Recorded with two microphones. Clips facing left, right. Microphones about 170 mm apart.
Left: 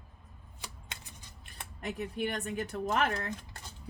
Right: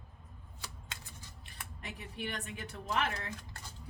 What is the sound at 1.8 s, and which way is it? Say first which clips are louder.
Speech: left 9 dB; 45° left (ahead or behind).